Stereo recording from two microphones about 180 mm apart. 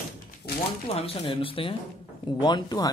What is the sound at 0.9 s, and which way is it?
Speech, 35° left (ahead or behind).